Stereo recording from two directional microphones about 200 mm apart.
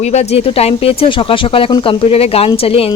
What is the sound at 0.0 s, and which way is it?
Speech, 35° left (ahead or behind).